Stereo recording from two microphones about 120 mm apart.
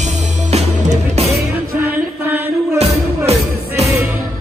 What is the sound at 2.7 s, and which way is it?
Music, 60° right (ahead or behind).